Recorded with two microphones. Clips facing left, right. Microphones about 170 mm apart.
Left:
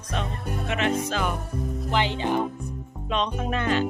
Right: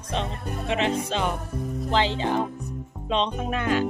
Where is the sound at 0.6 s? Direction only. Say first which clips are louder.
Right 2 dB; 30° right (ahead or behind).